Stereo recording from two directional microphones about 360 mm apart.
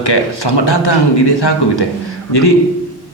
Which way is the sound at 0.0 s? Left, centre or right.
Left.